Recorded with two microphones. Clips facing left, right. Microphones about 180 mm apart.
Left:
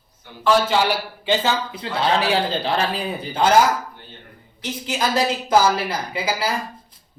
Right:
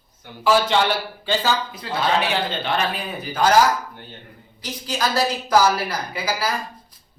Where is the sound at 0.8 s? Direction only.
10° left (ahead or behind).